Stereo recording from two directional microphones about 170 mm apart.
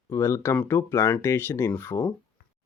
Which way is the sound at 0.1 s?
15° left (ahead or behind).